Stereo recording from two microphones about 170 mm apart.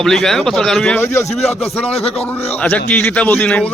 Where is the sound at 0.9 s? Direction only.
15° left (ahead or behind).